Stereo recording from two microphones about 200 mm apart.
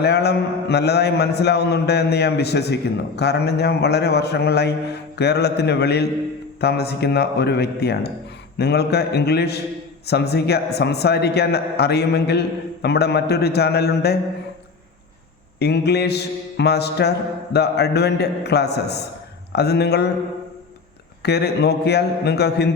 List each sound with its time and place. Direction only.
0.0 s a man's voice: 55° left (ahead or behind)
15.5 s a man's voice: 55° left (ahead or behind)
21.2 s a man's voice: 55° left (ahead or behind)